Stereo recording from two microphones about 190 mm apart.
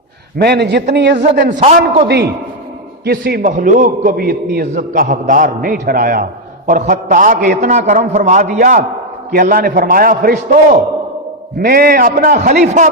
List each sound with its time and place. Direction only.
0.3 s a man's voice: 60° right (ahead or behind)
1.5 s a man's voice: 40° right (ahead or behind)
2.0 s a man's voice: 60° right (ahead or behind); by 12.9 s 45° right (ahead or behind)